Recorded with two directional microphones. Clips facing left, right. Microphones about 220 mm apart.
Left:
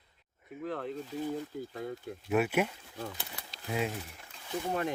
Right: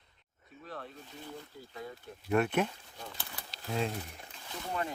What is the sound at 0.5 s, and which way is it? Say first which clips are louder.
Speech: left 9 dB; 75° left (ahead or behind).